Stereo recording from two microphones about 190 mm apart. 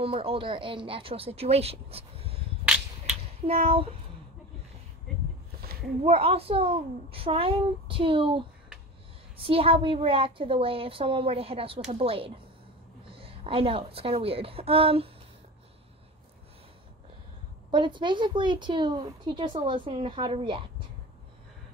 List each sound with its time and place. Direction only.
0.0 s a woman's voice: 30° right (ahead or behind)
2.6 s a sound: 5° right (ahead or behind)
3.4 s speech: 30° right (ahead or behind)
6.0 s a woman's voice: 30° right (ahead or behind)
17.6 s a woman's voice: 25° right (ahead or behind)